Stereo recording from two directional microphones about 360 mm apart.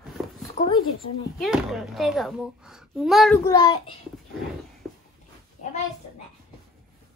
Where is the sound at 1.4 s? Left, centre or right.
Centre.